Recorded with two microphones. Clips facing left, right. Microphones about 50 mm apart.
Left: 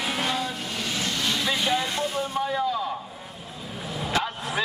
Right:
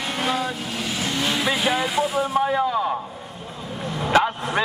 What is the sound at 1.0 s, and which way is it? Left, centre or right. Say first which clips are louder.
Vehicle: right 4 dB; centre.